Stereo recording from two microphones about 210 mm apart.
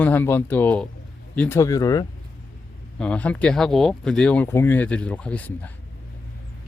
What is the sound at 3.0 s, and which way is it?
Speech, 5° left (ahead or behind).